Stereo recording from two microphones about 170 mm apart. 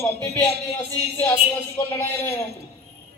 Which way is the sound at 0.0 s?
10° left (ahead or behind).